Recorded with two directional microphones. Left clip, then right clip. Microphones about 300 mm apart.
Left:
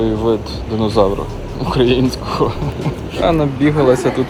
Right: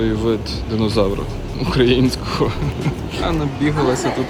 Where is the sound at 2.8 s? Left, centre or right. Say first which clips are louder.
Left 8 dB; centre.